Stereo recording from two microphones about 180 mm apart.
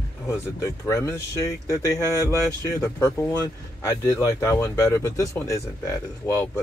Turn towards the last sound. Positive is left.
turn(degrees=15)  # may be behind; listen again after turning